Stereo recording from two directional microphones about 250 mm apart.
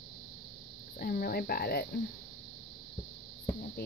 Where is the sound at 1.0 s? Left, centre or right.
Left.